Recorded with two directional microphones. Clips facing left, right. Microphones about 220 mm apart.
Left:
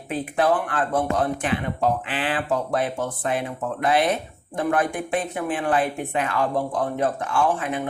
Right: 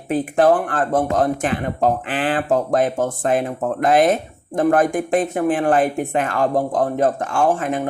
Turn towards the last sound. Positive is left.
turn(degrees=-45)  # may be behind; listen again after turning